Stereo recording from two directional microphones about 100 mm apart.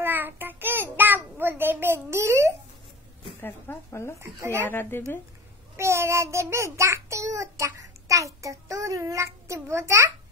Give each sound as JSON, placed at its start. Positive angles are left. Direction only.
{"t": 0.0, "sound": "child singing", "side_deg": -20}
{"t": 3.3, "sound": "speech", "side_deg": 20}
{"t": 4.2, "sound": "a child's voice", "side_deg": -30}
{"t": 4.6, "sound": "speech", "side_deg": 20}
{"t": 5.8, "sound": "a child's voice", "side_deg": -25}